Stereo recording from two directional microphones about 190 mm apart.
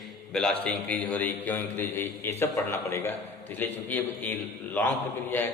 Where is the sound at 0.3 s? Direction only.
5° left (ahead or behind).